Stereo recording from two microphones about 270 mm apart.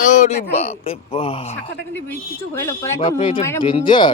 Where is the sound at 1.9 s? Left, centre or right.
Centre.